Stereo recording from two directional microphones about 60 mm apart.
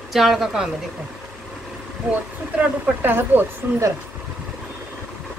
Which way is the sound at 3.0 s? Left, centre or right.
Right.